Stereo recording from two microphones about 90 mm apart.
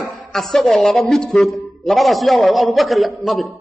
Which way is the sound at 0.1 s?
5° left (ahead or behind).